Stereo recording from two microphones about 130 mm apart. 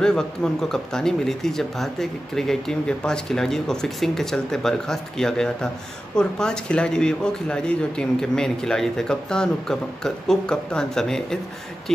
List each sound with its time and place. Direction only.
0.0 s speech: 5° left (ahead or behind)